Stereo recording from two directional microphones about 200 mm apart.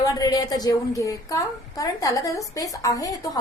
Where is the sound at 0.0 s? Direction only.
20° left (ahead or behind).